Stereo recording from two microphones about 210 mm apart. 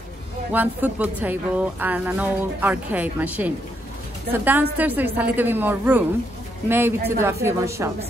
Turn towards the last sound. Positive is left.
turn(degrees=-15)  # may be behind; listen again after turning